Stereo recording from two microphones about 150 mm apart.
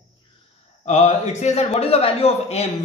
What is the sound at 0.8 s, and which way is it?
A man's voice, 50° left (ahead or behind).